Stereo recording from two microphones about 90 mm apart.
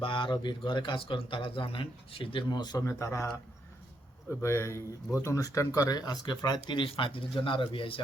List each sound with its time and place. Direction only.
0.0 s a man's voice: 65° left (ahead or behind)
2.5 s speech: 55° left (ahead or behind)
3.0 s speech: 30° left (ahead or behind)
4.3 s speech: 30° left (ahead or behind); by 6.6 s 50° left (ahead or behind)
6.7 s a man's voice: 70° left (ahead or behind)